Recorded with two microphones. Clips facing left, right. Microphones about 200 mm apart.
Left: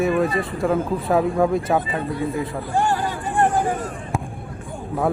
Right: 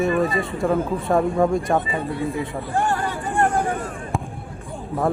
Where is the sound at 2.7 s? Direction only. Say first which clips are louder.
Left 1 dB; 30° left (ahead or behind).